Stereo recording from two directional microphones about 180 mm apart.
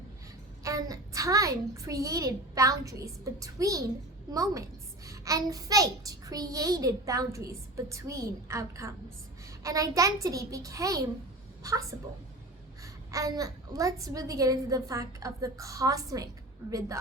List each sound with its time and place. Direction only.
0.6 s a child's voice: 20° right (ahead or behind)